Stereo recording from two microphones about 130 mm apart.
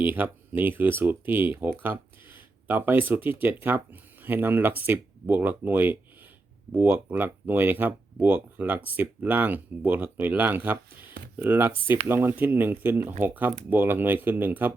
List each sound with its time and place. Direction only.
0.0 s speech: 15° right (ahead or behind)